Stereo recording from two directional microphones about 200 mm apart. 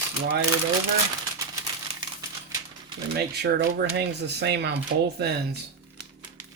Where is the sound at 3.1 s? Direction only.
55° right (ahead or behind).